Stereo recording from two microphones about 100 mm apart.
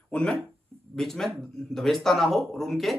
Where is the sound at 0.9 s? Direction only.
5° left (ahead or behind).